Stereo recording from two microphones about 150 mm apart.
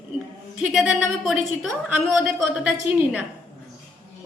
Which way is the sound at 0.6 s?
Centre (ahead or behind).